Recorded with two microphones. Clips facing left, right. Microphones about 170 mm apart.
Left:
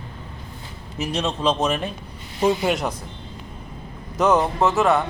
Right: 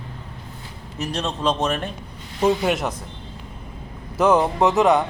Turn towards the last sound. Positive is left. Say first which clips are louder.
# right 2 dB
turn(degrees=-15)  # may be behind; listen again after turning